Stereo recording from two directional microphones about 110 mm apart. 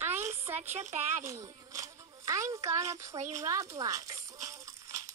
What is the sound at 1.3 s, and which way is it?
Music, 30° right (ahead or behind).